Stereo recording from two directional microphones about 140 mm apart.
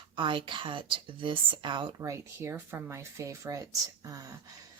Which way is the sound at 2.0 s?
20° right (ahead or behind).